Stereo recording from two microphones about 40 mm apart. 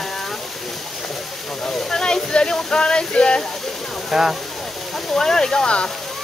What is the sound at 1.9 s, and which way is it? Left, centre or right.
Speech, centre.